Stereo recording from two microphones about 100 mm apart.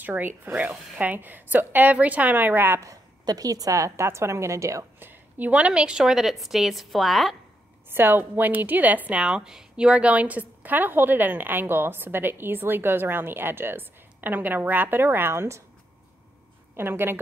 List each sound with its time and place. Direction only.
0.0 s a woman's voice: 15° right (ahead or behind)
2.8 s a woman's voice: 35° right (ahead or behind)
5.4 s a woman's voice: 15° right (ahead or behind)
7.9 s a woman's voice: 20° right (ahead or behind)
16.7 s a woman's voice: 20° right (ahead or behind)